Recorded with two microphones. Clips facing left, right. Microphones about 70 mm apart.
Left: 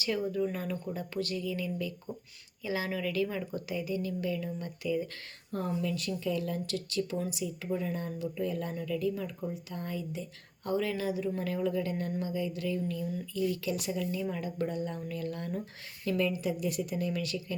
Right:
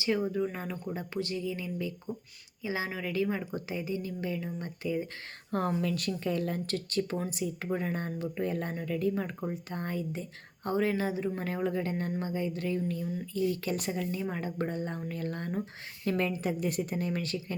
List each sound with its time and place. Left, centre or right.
0.0 s a woman's voice: right
5.5 s speech: right
5.8 s speech: right